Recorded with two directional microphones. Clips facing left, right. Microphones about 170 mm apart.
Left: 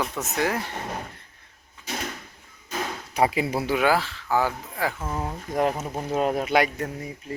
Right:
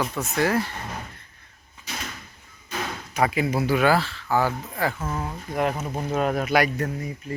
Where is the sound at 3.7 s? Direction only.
15° left (ahead or behind).